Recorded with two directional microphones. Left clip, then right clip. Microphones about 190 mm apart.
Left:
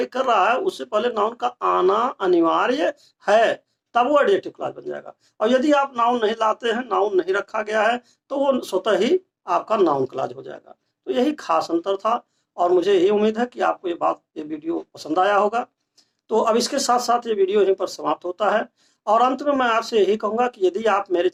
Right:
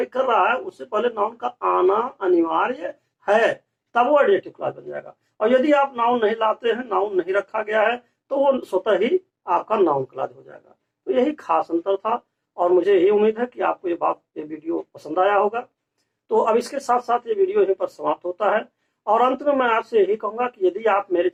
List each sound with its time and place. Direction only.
0.0 s speech: 20° left (ahead or behind)